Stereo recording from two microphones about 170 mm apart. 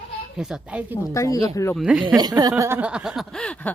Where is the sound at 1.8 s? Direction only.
5° right (ahead or behind).